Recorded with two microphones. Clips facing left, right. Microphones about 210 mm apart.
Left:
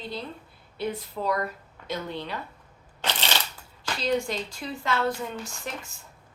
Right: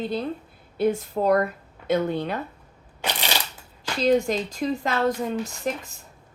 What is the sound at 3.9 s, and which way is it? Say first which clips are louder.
Speech: right 7 dB; 45° right (ahead or behind).